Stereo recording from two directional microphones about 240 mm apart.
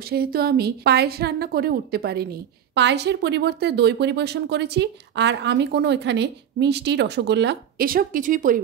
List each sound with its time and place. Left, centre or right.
0.1 s a woman's voice: right